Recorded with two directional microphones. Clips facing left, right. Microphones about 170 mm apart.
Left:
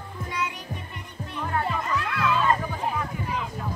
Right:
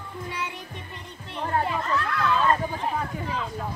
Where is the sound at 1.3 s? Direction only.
35° right (ahead or behind).